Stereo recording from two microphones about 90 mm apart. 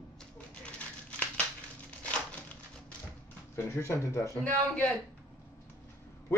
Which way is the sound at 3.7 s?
30° left (ahead or behind).